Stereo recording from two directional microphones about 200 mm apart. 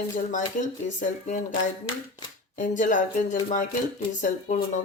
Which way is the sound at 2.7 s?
40° left (ahead or behind).